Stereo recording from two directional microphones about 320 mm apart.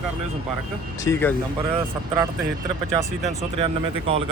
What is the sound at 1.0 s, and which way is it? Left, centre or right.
Speech, centre.